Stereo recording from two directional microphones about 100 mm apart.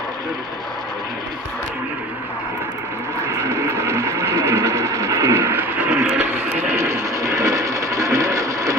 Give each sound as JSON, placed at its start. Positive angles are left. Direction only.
{"t": 3.2, "sound": "vehicle", "side_deg": -30}